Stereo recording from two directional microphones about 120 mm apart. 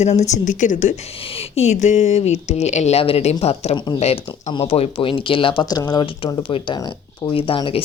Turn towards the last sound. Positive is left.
turn(degrees=50)  # may be behind; listen again after turning